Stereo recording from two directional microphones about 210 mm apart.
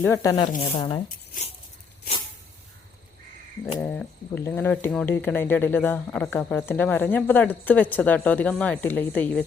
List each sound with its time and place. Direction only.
0.0 s speech: 15° left (ahead or behind)
3.8 s speech: 5° left (ahead or behind)